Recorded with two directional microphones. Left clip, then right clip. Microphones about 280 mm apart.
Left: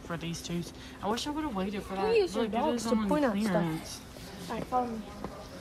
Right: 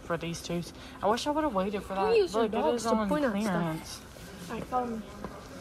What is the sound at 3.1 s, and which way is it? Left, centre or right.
Speech, left.